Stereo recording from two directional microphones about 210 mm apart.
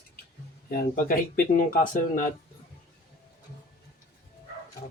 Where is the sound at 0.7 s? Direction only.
45° left (ahead or behind).